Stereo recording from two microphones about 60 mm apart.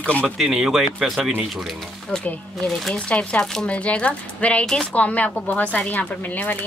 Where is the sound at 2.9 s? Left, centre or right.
Centre.